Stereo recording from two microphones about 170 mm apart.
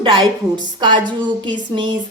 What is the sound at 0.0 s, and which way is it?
A woman's voice, 25° right (ahead or behind).